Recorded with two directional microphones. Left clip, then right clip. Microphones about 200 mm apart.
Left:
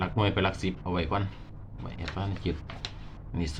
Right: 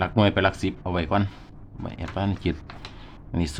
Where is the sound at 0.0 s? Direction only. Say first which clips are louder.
Right 7 dB; 45° right (ahead or behind).